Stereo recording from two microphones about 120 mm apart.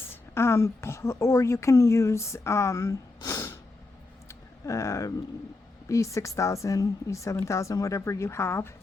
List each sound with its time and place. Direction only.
0.1 s a woman's voice: 20° left (ahead or behind)
4.3 s a sound: 25° left (ahead or behind)
5.9 s speech: 25° left (ahead or behind)